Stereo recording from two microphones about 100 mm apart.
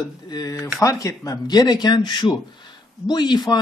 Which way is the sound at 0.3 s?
40° left (ahead or behind).